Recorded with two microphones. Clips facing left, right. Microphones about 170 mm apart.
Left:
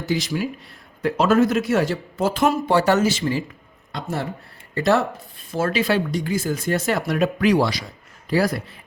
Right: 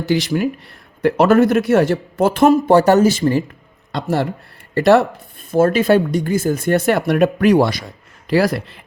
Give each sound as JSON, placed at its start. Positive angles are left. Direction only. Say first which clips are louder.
{"t": 0.1, "sound": "a man's voice", "louder": "right 6 dB", "side_deg": -65}
{"t": 3.9, "sound": "speech", "louder": "right 8 dB", "side_deg": -75}
{"t": 5.5, "sound": "a man's voice", "louder": "right 8 dB", "side_deg": -50}
{"t": 8.3, "sound": "speech", "louder": "right 5 dB", "side_deg": -85}